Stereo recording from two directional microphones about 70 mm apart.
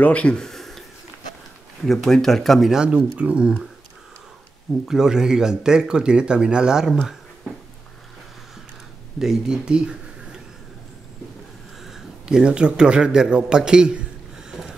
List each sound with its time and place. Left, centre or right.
0.0 s speech: centre
2.7 s speech: centre
4.8 s speech: centre
9.2 s speech: centre
11.8 s a man's voice: centre
14.5 s a sound: centre